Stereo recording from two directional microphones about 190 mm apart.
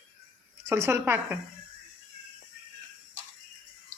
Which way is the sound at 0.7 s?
10° right (ahead or behind).